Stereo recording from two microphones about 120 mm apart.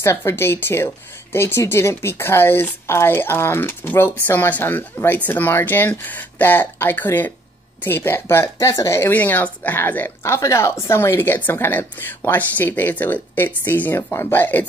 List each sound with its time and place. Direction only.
0.0 s speech: 25° left (ahead or behind)